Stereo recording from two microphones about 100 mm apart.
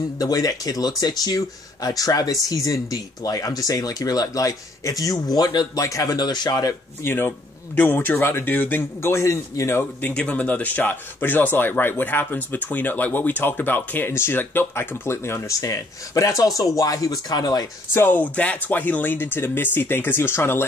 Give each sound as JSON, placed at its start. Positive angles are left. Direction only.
{"t": 0.2, "sound": "speech", "side_deg": 35}
{"t": 5.8, "sound": "speech", "side_deg": 35}
{"t": 7.1, "sound": "speech", "side_deg": 20}
{"t": 10.1, "sound": "speech", "side_deg": 10}
{"t": 17.9, "sound": "speech", "side_deg": 20}